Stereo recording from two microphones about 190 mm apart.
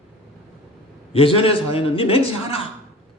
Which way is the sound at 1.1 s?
30° left (ahead or behind).